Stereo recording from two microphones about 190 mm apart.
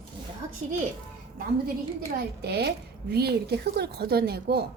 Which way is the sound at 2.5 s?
55° right (ahead or behind).